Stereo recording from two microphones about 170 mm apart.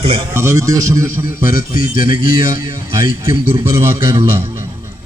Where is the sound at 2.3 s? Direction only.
20° right (ahead or behind).